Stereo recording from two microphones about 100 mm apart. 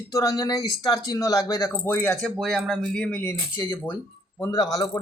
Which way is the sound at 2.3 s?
5° right (ahead or behind).